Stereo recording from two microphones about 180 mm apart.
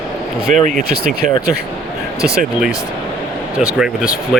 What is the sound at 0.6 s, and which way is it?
Speech, 45° right (ahead or behind).